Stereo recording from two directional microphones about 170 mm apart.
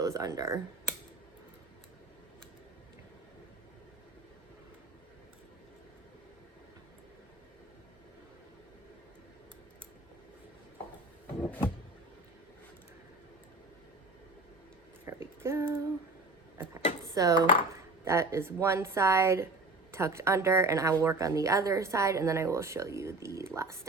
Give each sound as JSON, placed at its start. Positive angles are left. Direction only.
{"t": 0.0, "sound": "speech", "side_deg": -20}
{"t": 11.3, "sound": "vehicle", "side_deg": 10}
{"t": 15.0, "sound": "a sound", "side_deg": -15}
{"t": 17.2, "sound": "a woman's voice", "side_deg": -20}